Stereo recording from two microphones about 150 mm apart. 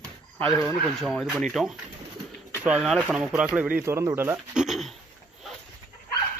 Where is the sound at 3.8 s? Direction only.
20° right (ahead or behind).